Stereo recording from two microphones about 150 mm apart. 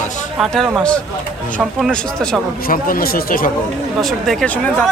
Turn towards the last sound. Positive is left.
turn(degrees=5)  # may be behind; listen again after turning